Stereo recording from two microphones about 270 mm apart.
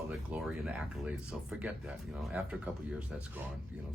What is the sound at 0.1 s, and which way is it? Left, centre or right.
Speech, centre.